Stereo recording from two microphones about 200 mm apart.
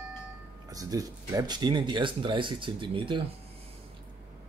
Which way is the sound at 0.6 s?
15° right (ahead or behind).